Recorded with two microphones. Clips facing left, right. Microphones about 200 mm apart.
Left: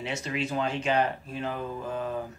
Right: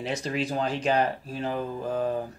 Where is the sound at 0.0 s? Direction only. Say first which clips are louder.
Right 3 dB; 35° right (ahead or behind).